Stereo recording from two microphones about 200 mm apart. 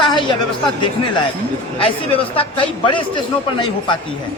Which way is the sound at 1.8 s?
25° left (ahead or behind).